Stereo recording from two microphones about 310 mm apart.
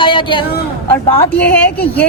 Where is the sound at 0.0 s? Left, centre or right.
Centre.